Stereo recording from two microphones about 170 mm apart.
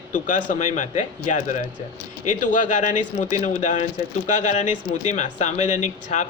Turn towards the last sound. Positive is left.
turn(degrees=45)  # may be behind; listen again after turning